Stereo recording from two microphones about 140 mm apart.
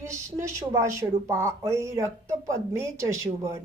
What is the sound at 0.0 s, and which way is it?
Speech, 20° right (ahead or behind).